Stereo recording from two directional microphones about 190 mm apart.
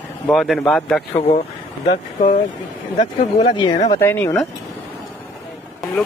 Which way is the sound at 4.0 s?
10° left (ahead or behind).